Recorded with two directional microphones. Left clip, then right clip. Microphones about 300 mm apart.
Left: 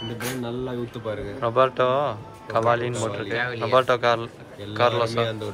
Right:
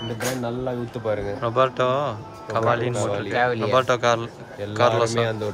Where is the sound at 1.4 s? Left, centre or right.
Centre.